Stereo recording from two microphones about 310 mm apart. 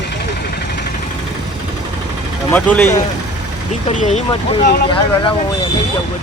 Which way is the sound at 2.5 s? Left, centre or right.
Centre.